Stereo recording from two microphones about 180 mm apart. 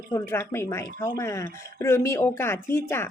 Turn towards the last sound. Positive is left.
turn(degrees=15)  # may be behind; listen again after turning